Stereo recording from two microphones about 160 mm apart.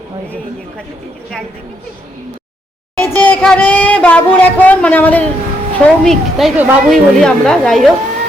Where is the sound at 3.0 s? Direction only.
10° left (ahead or behind).